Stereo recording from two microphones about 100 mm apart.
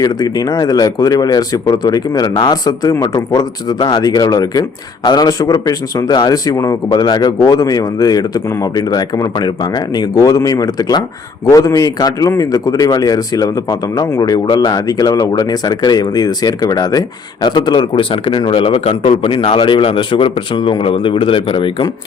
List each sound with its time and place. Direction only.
0.0 s a man's voice: 40° left (ahead or behind); by 21.8 s 60° left (ahead or behind)